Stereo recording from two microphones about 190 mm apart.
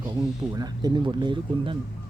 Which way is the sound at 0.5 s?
20° right (ahead or behind).